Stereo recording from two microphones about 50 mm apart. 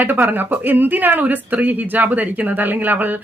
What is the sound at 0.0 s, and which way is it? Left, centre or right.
Speech, right.